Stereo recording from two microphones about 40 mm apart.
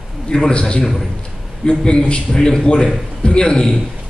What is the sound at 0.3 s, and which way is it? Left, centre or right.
A man's voice, left.